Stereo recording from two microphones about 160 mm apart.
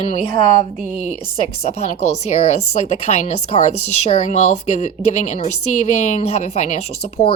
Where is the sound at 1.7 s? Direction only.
45° left (ahead or behind).